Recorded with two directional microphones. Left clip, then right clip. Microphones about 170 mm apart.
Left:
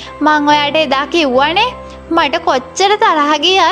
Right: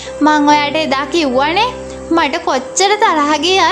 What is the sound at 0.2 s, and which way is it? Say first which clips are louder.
Speech: even; 25° left (ahead or behind).